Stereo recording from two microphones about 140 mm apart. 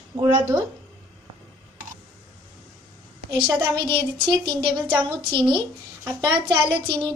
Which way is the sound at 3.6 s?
30° right (ahead or behind).